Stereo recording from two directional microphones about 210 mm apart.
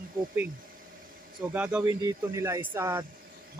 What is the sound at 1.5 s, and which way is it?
Speech, 5° right (ahead or behind).